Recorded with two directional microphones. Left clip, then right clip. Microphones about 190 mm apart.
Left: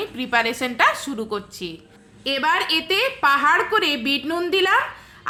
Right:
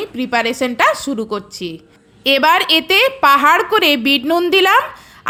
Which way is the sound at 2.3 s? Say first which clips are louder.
Right 8 dB; 45° right (ahead or behind).